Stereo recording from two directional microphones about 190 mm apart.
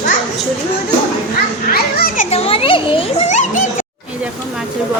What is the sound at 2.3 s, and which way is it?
A child's voice, 30° left (ahead or behind).